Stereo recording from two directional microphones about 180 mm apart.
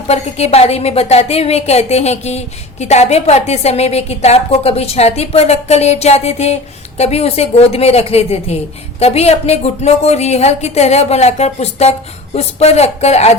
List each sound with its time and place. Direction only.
0.1 s speech: 35° left (ahead or behind)